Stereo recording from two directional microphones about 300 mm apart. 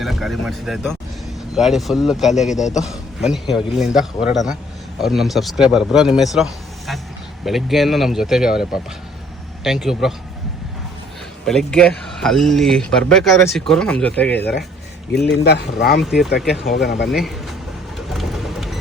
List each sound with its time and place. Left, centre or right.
0.0 s a man's voice: centre
11.4 s a man's voice: centre
15.4 s speech: left
16.4 s a man's voice: centre
16.8 s speech: left
17.1 s a man's voice: centre
17.9 s vehicle: centre